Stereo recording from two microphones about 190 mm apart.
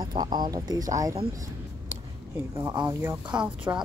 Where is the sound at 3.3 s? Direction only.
5° right (ahead or behind).